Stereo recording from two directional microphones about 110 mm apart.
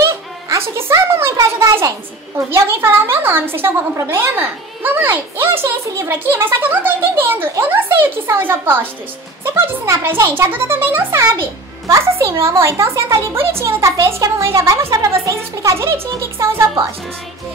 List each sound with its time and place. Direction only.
0.0 s a child's voice: 25° right (ahead or behind)